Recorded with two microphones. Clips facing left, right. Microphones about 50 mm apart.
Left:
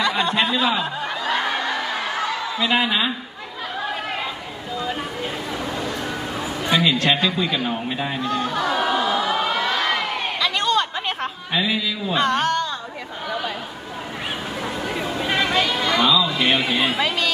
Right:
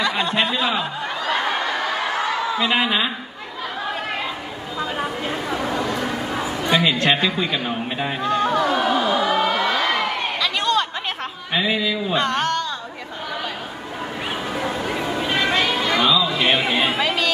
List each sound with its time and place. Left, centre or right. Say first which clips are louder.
0.0 s snicker: even; centre
2.7 s a man's voice: left 2 dB; centre
6.8 s a man's voice: even; right
8.2 s music: right 6 dB; right
8.5 s a sound: right 2 dB; centre
11.5 s a man's voice: right 2 dB; centre
12.1 s speech: left 3 dB; centre
15.3 s chatter: even; centre
17.0 s speech: right 1 dB; centre